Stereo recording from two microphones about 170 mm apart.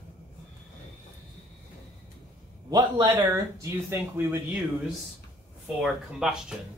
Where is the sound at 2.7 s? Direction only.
25° right (ahead or behind).